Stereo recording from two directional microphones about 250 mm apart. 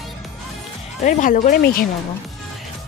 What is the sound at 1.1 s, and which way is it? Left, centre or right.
Speech, left.